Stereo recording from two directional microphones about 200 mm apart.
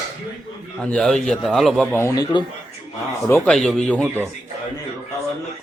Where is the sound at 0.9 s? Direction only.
Centre (ahead or behind).